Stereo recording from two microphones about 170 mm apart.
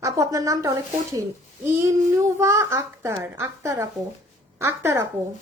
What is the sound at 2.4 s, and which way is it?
A child's voice, 15° right (ahead or behind).